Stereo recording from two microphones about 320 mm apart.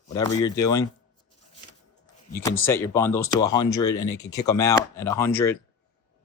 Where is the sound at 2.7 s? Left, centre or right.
Centre.